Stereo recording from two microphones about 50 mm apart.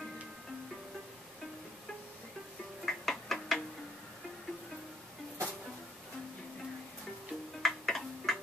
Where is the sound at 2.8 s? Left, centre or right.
Centre.